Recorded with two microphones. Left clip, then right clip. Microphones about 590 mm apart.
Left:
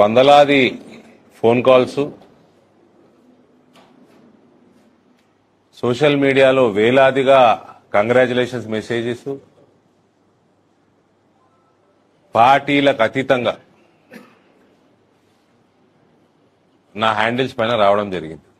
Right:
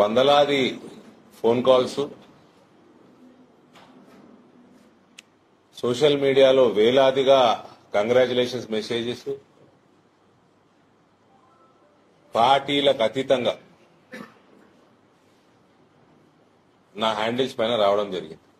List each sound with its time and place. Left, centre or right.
0.0 s a man's voice: left
5.8 s a man's voice: left
12.3 s a man's voice: left
16.9 s a man's voice: left